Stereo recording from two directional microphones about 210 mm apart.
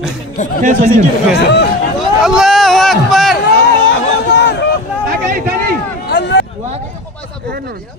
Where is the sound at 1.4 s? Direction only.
55° left (ahead or behind).